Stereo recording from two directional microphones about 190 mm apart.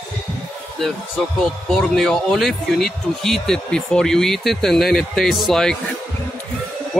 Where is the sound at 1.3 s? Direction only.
Centre (ahead or behind).